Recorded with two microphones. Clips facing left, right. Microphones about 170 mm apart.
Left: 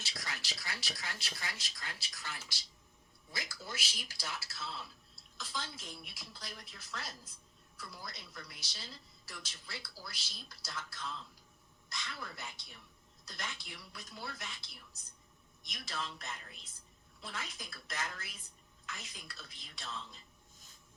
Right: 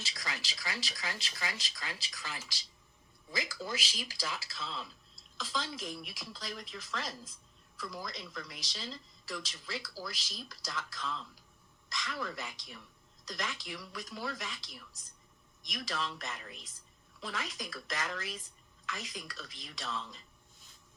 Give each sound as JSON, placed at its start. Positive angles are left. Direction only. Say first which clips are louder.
{"t": 0.0, "sound": "speech", "louder": "right 3 dB", "side_deg": -90}